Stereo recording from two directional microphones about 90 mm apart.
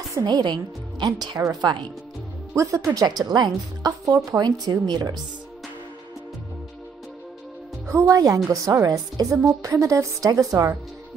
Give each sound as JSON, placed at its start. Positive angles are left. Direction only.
{"t": 0.1, "sound": "a woman's voice", "side_deg": -50}
{"t": 2.5, "sound": "speech", "side_deg": -35}
{"t": 8.0, "sound": "a woman's voice", "side_deg": -40}